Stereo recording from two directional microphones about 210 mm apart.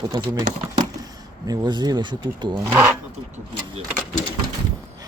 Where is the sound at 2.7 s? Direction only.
10° right (ahead or behind).